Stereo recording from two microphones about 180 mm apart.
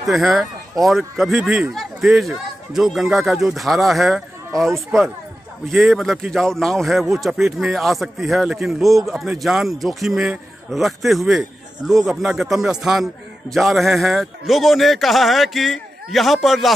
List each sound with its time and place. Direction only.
0.0 s a man's voice: centre (ahead or behind)